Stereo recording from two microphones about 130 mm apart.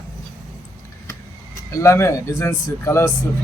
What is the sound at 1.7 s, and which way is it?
A man's voice, 20° left (ahead or behind).